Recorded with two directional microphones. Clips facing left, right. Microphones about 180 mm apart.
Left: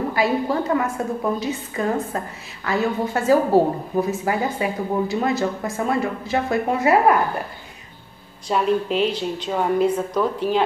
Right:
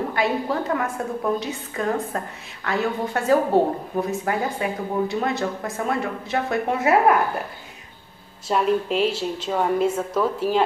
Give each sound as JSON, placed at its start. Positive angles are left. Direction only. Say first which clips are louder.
{"t": 0.1, "sound": "a woman's voice", "louder": "left 2 dB", "side_deg": 5}
{"t": 8.5, "sound": "a woman's voice", "louder": "left 1 dB", "side_deg": 0}